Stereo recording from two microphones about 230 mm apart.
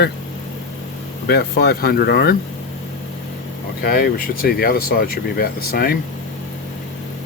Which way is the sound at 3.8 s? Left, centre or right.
Left.